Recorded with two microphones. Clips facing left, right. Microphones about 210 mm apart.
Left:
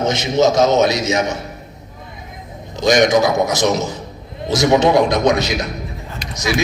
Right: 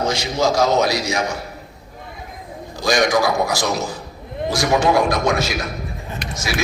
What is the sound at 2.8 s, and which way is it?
A man's voice, 20° left (ahead or behind).